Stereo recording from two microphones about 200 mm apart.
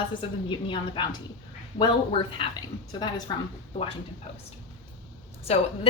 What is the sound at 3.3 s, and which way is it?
Speech, 20° left (ahead or behind).